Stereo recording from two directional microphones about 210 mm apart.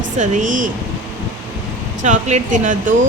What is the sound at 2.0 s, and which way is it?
Speech, 35° right (ahead or behind).